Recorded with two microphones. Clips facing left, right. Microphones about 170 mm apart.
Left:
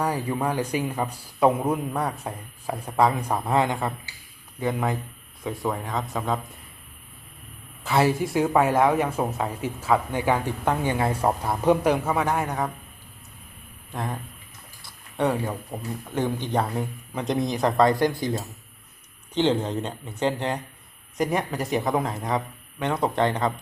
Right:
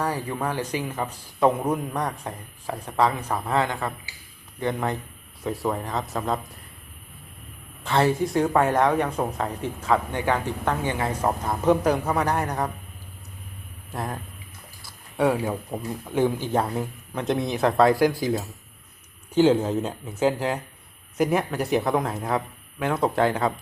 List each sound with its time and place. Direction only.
0.0 s speech: 10° left (ahead or behind)
4.6 s speech: 5° left (ahead or behind)
7.9 s speech: 5° left (ahead or behind)
13.9 s speech: 5° right (ahead or behind)
14.8 s a sound: 5° right (ahead or behind)
16.1 s speech: 5° right (ahead or behind)